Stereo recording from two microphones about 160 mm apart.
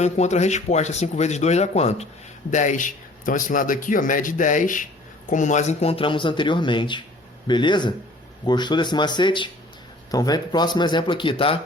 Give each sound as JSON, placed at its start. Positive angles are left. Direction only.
{"t": 0.0, "sound": "speech", "side_deg": 45}